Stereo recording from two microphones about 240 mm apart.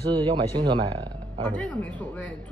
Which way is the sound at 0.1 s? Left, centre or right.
Centre.